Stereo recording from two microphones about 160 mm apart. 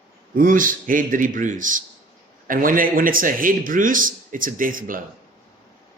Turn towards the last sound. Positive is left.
turn(degrees=-60)  # may be behind; listen again after turning